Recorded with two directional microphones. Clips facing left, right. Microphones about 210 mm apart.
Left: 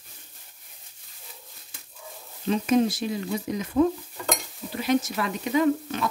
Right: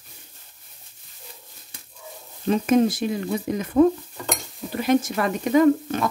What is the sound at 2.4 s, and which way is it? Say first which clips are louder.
Speech: right 3 dB; 50° right (ahead or behind).